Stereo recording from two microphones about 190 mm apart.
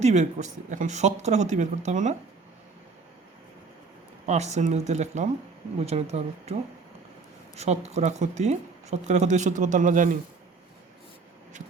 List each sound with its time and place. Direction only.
0.0 s speech: 35° right (ahead or behind)
4.3 s speech: 35° right (ahead or behind)